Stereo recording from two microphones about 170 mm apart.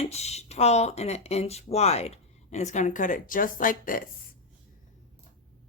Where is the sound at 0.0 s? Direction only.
40° left (ahead or behind); by 4.1 s 55° left (ahead or behind).